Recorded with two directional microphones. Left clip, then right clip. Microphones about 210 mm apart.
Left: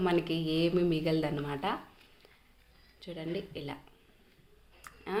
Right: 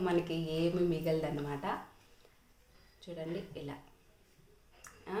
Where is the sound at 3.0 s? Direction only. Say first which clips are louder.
Left 3 dB; 35° left (ahead or behind).